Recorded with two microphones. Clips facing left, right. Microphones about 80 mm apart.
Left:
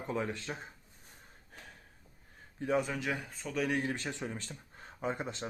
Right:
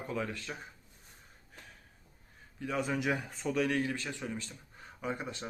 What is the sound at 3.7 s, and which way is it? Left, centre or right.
Speech, left.